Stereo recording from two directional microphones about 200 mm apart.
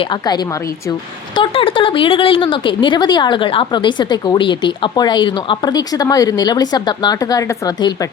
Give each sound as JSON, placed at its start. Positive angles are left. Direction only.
{"t": 0.0, "sound": "speech", "side_deg": 20}